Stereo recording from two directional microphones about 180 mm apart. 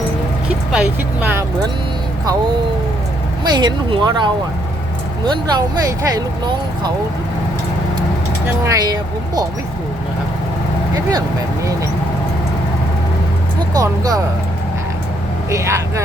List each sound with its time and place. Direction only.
0.7 s speech: 5° right (ahead or behind)
3.4 s speech: 25° right (ahead or behind)
8.6 s speech: 20° right (ahead or behind)
13.7 s speech: 20° right (ahead or behind)
15.4 s speech: 15° right (ahead or behind)